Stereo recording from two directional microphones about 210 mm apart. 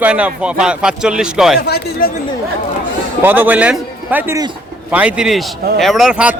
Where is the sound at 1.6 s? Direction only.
50° left (ahead or behind).